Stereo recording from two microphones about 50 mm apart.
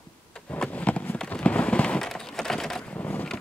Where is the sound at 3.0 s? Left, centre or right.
Left.